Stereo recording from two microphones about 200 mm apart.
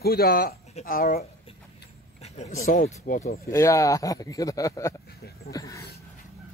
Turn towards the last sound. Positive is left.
turn(degrees=15)  # may be behind; listen again after turning